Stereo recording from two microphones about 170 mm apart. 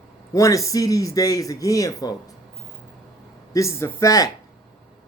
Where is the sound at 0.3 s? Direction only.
20° left (ahead or behind).